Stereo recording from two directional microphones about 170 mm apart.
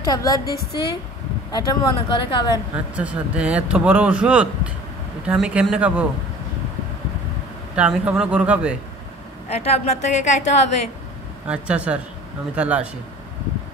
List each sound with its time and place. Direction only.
0.0 s a woman's voice: 20° left (ahead or behind)
0.5 s a woman's voice: 65° left (ahead or behind)
1.5 s a woman's voice: 20° left (ahead or behind)
2.7 s speech: 5° right (ahead or behind)
7.7 s speech: 5° right (ahead or behind)
9.5 s a woman's voice: 35° left (ahead or behind)
11.4 s speech: 5° right (ahead or behind)